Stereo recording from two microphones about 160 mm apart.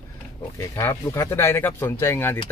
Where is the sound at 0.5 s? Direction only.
20° left (ahead or behind).